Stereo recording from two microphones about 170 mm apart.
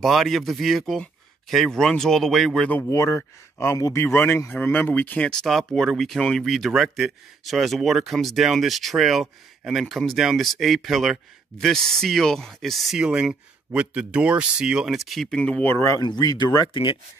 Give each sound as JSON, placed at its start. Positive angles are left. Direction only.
{"t": 0.0, "sound": "speech", "side_deg": 0}